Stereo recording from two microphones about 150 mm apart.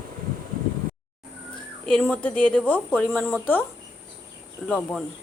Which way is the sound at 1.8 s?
5° left (ahead or behind).